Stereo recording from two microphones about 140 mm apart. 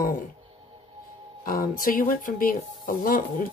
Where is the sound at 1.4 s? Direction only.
85° left.